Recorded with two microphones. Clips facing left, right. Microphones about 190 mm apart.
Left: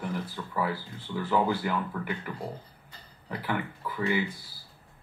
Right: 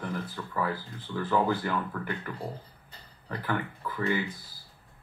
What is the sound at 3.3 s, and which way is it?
Speech, 10° left (ahead or behind).